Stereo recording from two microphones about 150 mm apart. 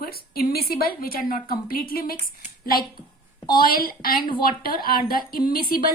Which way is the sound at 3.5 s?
75° left (ahead or behind).